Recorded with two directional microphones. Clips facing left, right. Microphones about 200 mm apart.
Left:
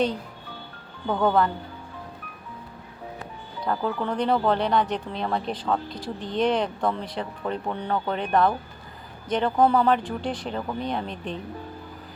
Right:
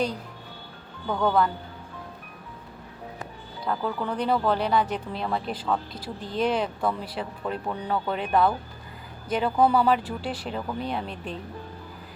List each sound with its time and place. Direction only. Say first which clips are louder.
1.0 s speech: left 2 dB; 10° left (ahead or behind)
3.7 s speech: left 2 dB; 5° right (ahead or behind)